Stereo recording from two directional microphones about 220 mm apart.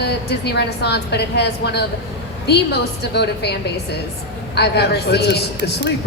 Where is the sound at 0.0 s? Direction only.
50° left (ahead or behind).